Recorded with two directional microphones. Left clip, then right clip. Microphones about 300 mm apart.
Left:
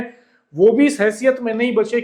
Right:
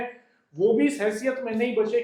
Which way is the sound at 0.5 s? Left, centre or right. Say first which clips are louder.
Left 8 dB; left.